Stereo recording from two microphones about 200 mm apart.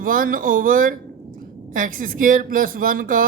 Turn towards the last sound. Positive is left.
turn(degrees=-45)  # may be behind; listen again after turning